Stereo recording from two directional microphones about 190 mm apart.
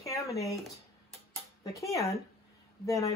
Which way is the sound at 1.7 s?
15° left (ahead or behind).